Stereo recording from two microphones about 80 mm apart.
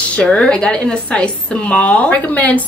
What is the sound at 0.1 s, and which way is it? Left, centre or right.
A woman's voice, centre.